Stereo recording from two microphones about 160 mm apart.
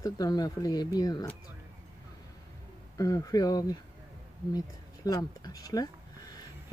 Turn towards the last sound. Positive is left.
turn(degrees=25)  # may be behind; listen again after turning